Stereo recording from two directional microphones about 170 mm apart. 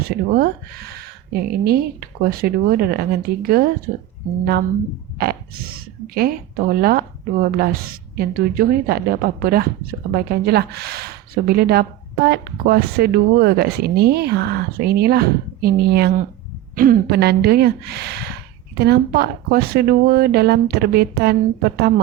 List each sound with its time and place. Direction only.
0.0 s a woman's voice: 60° right (ahead or behind)
1.6 s a woman's voice: 65° right (ahead or behind)
5.1 s a woman's voice: 65° right (ahead or behind)